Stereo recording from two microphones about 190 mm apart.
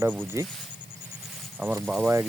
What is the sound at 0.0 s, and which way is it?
Speech, 10° right (ahead or behind).